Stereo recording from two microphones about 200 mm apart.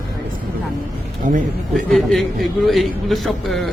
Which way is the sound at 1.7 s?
Centre (ahead or behind).